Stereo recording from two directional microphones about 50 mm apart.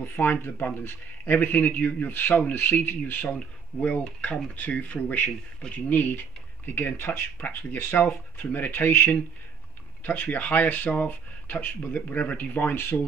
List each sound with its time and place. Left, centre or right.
0.0 s speech: left
2.5 s speech: left
3.3 s speech: left
7.3 s speech: left
10.0 s speech: left